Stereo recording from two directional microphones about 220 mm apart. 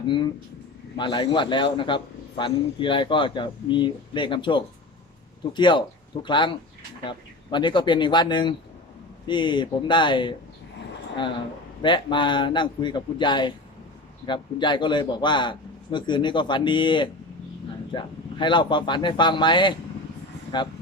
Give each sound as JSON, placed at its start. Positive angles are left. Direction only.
{"t": 0.9, "sound": "a man's voice", "side_deg": 20}
{"t": 11.8, "sound": "a man's voice", "side_deg": 20}